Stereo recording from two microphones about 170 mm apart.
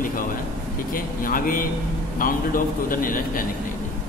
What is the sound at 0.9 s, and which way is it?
A man's voice, 55° left (ahead or behind).